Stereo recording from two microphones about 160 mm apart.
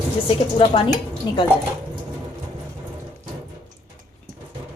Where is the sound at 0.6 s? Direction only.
35° left (ahead or behind).